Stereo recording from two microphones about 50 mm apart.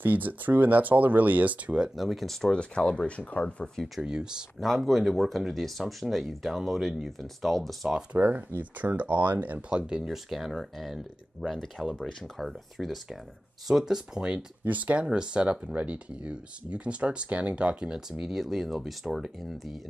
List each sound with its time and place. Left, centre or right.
0.0 s speech: right
2.0 s speech: centre
2.4 s speech: centre
4.0 s speech: centre
4.6 s speech: centre
8.1 s speech: right
9.7 s speech: right
9.9 s speech: centre
14.6 s speech: right
15.0 s speech: centre